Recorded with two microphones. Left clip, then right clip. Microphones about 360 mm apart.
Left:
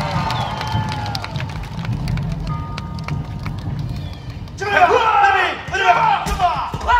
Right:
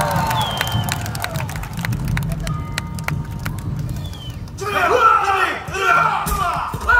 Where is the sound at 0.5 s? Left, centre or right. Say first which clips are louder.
Right 1 dB; right.